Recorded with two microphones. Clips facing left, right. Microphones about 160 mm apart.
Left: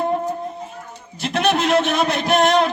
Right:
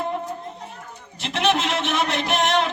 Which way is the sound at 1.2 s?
40° left (ahead or behind).